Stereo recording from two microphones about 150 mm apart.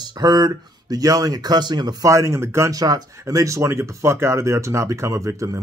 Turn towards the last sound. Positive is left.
turn(degrees=-20)  # may be behind; listen again after turning